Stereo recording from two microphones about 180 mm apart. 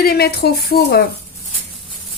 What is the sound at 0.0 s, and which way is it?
Speech, 60° left (ahead or behind).